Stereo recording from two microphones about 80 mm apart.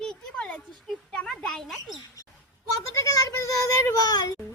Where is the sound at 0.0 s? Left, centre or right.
Centre.